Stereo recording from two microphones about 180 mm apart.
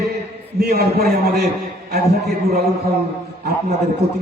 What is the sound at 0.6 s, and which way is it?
Speech, 65° right (ahead or behind).